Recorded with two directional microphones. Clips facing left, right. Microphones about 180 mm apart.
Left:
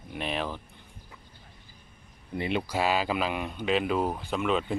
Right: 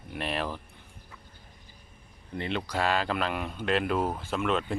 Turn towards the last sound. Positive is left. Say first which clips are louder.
# left 1 dB
turn(degrees=0)  # may be behind; listen again after turning